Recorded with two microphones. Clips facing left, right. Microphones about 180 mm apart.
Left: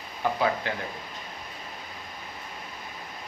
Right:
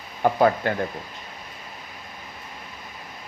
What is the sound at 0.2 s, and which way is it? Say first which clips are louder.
Speech: right 7 dB; 50° right (ahead or behind).